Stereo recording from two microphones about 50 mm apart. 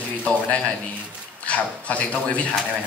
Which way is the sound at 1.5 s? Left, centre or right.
Left.